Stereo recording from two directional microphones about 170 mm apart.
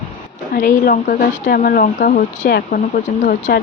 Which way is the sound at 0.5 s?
55° left (ahead or behind).